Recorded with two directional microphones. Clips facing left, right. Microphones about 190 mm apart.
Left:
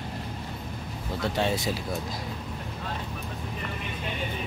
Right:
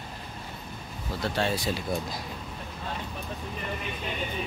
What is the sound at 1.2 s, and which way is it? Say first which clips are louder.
Speech: left 1 dB; 20° left (ahead or behind).